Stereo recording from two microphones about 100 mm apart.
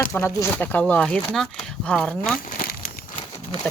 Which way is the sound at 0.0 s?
30° left (ahead or behind).